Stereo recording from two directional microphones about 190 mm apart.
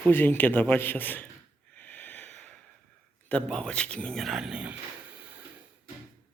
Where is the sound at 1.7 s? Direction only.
10° left (ahead or behind).